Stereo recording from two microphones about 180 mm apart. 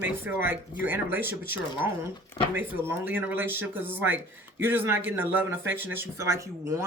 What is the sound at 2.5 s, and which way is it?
Speech, 10° right (ahead or behind).